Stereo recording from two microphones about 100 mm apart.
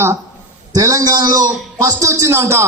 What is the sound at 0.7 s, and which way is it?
A man's voice, 35° right (ahead or behind).